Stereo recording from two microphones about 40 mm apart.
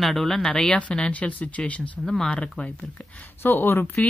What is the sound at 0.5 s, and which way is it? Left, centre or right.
Speech, left.